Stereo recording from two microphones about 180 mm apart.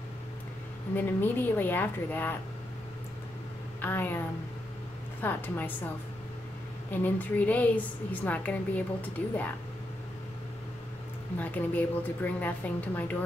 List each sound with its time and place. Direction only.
0.9 s a woman's voice: 10° left (ahead or behind)
3.8 s a woman's voice: 10° left (ahead or behind)
5.2 s a woman's voice: 10° left (ahead or behind)
6.9 s a woman's voice: 10° left (ahead or behind)
11.3 s a woman's voice: 10° left (ahead or behind)